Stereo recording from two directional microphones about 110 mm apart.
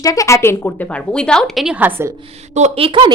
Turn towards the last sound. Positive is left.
turn(degrees=-60)  # may be behind; listen again after turning